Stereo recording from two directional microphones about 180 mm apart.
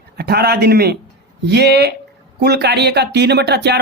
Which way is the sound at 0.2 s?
60° right (ahead or behind).